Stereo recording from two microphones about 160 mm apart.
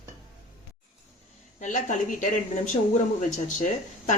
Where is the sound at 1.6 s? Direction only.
50° left (ahead or behind).